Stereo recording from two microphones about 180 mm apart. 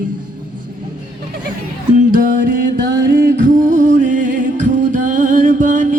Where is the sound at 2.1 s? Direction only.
50° right (ahead or behind).